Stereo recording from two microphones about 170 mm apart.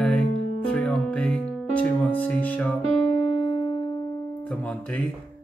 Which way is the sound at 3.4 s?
30° left (ahead or behind).